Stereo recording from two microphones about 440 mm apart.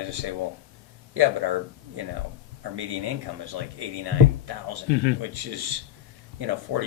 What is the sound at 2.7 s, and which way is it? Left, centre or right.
Speech, right.